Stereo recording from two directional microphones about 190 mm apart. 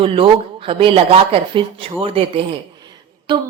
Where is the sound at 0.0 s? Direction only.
30° right (ahead or behind).